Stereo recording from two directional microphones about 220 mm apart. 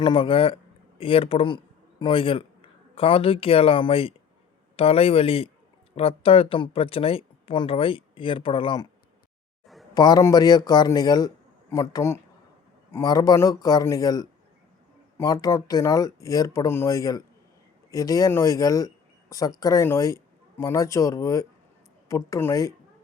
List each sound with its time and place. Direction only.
0.0 s speech: 20° left (ahead or behind)
9.9 s speech: 20° left (ahead or behind)